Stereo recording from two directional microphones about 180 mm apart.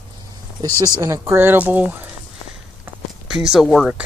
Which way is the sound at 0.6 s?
20° right (ahead or behind).